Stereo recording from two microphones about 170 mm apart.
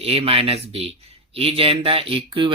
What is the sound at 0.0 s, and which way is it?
Speech, 35° right (ahead or behind).